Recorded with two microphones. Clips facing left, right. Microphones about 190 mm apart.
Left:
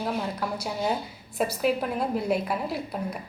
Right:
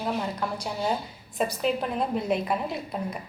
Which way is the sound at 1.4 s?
5° left (ahead or behind).